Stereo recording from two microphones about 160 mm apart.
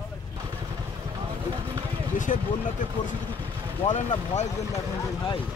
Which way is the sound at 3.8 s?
50° left (ahead or behind).